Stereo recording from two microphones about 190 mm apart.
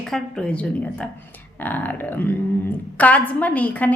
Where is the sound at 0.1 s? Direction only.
5° left (ahead or behind).